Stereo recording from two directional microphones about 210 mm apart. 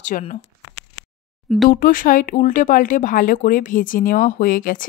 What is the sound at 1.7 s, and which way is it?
Speech, 40° left (ahead or behind).